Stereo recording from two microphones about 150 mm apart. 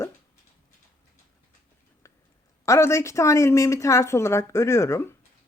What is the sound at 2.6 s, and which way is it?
Speech, 20° left (ahead or behind).